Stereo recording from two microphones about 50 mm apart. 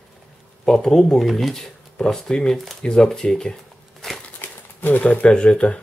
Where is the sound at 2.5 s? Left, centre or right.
Centre.